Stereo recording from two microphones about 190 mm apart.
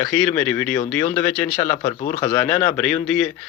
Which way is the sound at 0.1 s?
10° left (ahead or behind).